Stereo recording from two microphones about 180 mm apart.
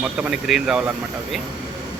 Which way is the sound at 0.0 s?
5° right (ahead or behind).